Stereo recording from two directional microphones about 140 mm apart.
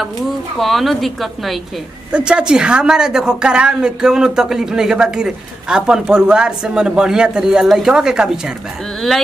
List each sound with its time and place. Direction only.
0.6 s a woman's voice: centre (ahead or behind)